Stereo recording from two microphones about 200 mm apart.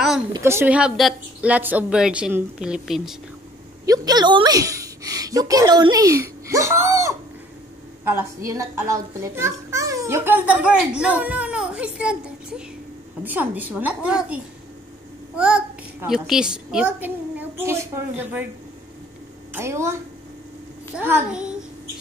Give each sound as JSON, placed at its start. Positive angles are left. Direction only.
{"t": 0.3, "sound": "a woman's voice", "side_deg": -10}
{"t": 3.8, "sound": "a child's voice", "side_deg": -20}
{"t": 19.5, "sound": "a child's voice", "side_deg": -15}